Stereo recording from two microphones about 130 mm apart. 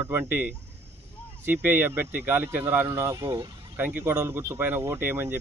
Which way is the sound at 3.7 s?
15° right (ahead or behind).